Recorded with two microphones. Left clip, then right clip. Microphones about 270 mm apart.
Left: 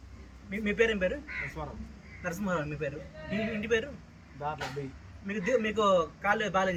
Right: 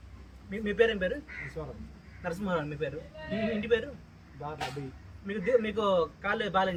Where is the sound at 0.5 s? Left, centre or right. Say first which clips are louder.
Right 1 dB; centre.